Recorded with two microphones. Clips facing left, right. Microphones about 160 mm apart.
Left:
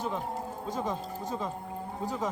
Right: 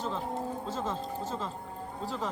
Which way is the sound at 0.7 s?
15° left (ahead or behind).